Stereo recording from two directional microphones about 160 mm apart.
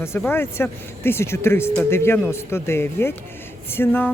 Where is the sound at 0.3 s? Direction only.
15° left (ahead or behind).